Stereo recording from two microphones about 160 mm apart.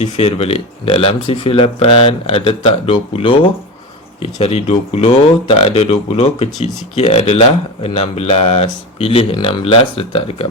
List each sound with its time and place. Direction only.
0.0 s speech: 40° left (ahead or behind)